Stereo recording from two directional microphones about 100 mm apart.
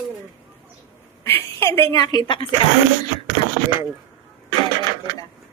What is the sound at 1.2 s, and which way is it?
Speech, 25° left (ahead or behind).